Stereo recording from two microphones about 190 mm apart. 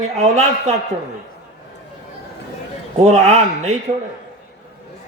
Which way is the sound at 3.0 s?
35° right (ahead or behind).